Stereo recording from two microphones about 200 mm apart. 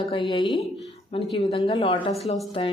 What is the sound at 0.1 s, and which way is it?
Speech, 25° left (ahead or behind).